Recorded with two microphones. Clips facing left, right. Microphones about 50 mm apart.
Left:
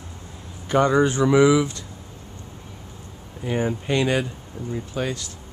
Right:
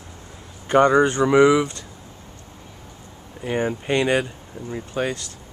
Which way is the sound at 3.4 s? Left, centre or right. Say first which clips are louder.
Right 1 dB; centre.